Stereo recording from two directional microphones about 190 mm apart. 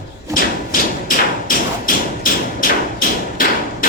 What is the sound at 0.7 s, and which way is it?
Thump, 45° left (ahead or behind).